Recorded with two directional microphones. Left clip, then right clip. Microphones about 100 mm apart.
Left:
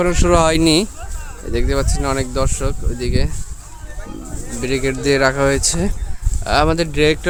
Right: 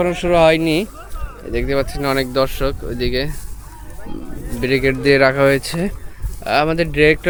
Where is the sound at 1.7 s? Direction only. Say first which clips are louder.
Right 3 dB; 30° left (ahead or behind).